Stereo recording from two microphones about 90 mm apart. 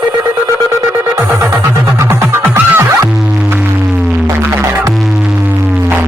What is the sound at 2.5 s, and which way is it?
Music, 25° right (ahead or behind).